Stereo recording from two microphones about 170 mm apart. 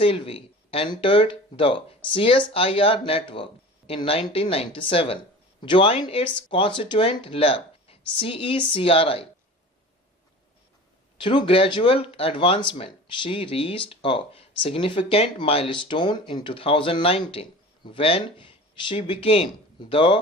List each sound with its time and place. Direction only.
0.0 s speech: 35° left (ahead or behind)
11.2 s speech: 30° left (ahead or behind)